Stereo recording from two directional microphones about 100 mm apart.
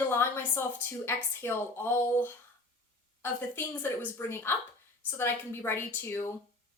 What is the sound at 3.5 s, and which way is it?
Speech, 20° left (ahead or behind).